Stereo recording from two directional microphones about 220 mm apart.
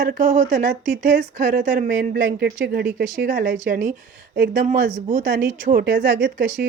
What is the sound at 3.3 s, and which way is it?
Speech, 35° right (ahead or behind).